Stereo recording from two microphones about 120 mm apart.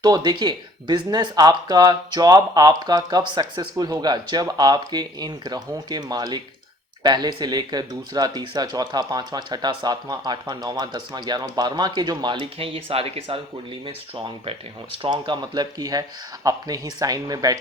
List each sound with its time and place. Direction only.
0.0 s speech: 35° right (ahead or behind); by 13.4 s 55° right (ahead or behind)
15.0 s speech: 40° right (ahead or behind)